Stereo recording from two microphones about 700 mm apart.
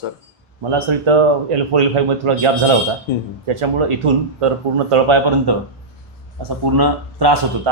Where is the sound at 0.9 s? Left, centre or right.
Right.